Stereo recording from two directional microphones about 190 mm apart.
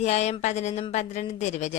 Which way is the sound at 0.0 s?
35° left (ahead or behind).